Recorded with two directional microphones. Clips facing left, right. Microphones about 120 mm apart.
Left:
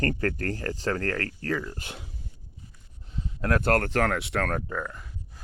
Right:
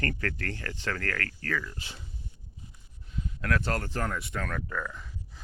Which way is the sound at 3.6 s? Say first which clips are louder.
Left 8 dB; 60° left (ahead or behind).